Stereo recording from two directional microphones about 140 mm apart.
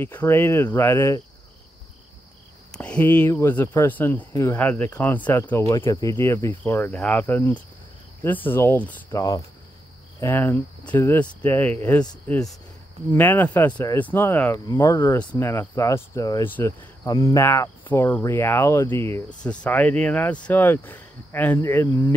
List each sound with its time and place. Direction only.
0.0 s speech: 15° left (ahead or behind)
2.7 s speech: 10° left (ahead or behind)
9.1 s speech: 25° left (ahead or behind)
10.2 s speech: 15° left (ahead or behind)
16.4 s speech: 15° left (ahead or behind)
17.0 s speech: 25° left (ahead or behind)